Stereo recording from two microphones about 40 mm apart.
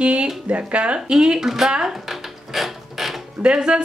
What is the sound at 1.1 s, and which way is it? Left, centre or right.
Speech, centre.